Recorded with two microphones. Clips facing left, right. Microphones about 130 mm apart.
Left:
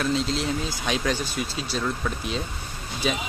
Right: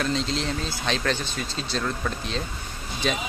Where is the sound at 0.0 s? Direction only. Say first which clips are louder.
Left 1 dB; 5° left (ahead or behind).